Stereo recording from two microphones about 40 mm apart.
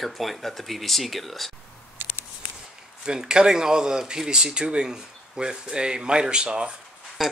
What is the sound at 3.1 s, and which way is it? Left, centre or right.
Speech, right.